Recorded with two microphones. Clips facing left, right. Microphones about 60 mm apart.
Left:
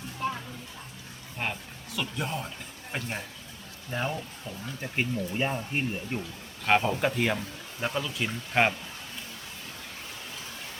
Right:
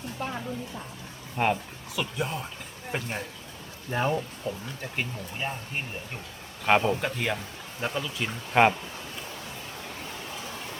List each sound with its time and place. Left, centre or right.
1.4 s speech: centre
3.9 s speech: centre
4.8 s speech: centre
6.7 s speech: centre
7.0 s speech: centre